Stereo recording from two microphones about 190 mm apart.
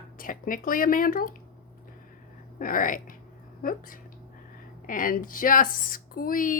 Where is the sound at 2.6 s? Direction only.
45° left (ahead or behind).